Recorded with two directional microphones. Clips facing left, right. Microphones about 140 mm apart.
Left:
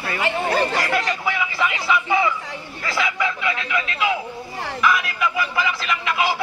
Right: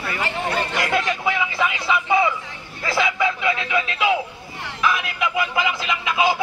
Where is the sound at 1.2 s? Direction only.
25° right (ahead or behind).